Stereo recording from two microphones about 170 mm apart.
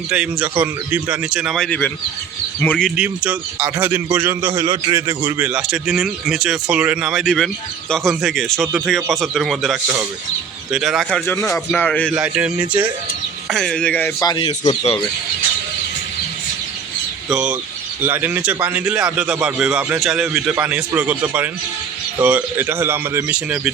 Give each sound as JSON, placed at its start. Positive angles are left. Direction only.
{"t": 0.1, "sound": "speech", "side_deg": -5}
{"t": 2.9, "sound": "a man's voice", "side_deg": -5}
{"t": 9.8, "sound": "a man's voice", "side_deg": -15}
{"t": 12.1, "sound": "a man's voice", "side_deg": -5}
{"t": 13.5, "sound": "speech", "side_deg": 5}
{"t": 14.2, "sound": "speech", "side_deg": 25}
{"t": 17.2, "sound": "a man's voice", "side_deg": -5}